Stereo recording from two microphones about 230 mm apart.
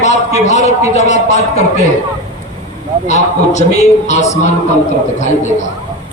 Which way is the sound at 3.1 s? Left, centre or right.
Left.